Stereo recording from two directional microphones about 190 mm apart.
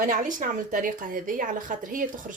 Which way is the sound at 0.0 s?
45° right (ahead or behind).